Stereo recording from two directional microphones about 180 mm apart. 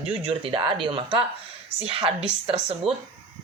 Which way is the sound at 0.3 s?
30° right (ahead or behind).